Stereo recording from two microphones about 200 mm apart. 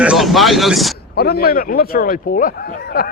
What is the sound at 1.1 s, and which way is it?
Speech, 50° left (ahead or behind).